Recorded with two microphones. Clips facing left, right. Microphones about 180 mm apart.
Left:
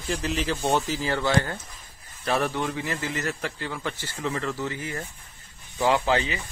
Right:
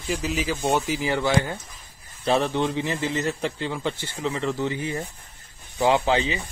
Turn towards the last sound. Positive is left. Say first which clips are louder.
# right 2 dB
turn(degrees=-20)  # may be behind; listen again after turning